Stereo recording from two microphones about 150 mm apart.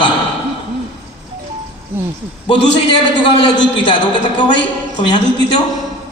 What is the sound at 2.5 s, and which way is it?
A man's voice, 35° left (ahead or behind).